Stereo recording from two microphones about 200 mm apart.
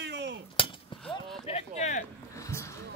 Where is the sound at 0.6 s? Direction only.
25° left (ahead or behind).